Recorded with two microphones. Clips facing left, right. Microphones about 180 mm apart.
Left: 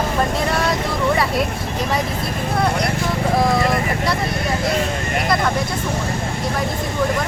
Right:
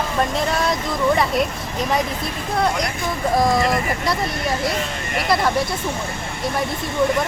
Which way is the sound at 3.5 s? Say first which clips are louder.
Left 1 dB; centre (ahead or behind).